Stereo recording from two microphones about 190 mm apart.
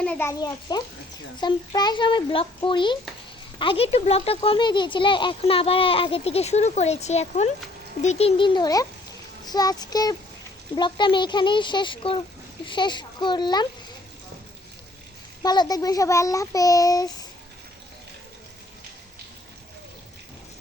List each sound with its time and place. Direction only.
0.0 s a child's voice: 10° left (ahead or behind)
15.4 s speech: 20° left (ahead or behind)